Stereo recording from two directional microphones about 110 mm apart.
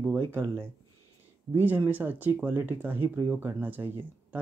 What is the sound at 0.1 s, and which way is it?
Speech, 20° right (ahead or behind).